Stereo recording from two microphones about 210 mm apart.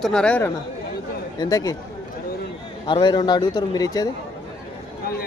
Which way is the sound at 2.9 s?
20° left (ahead or behind).